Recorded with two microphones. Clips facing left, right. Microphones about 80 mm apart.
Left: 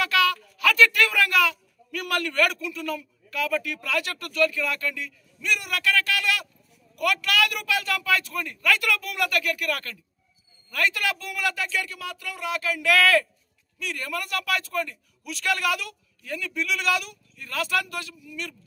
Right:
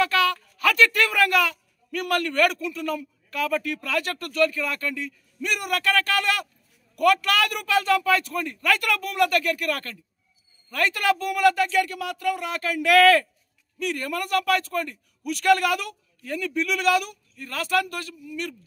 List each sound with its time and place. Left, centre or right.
0.0 s a man's voice: right